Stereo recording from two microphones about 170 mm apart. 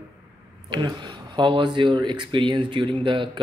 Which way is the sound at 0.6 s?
25° right (ahead or behind).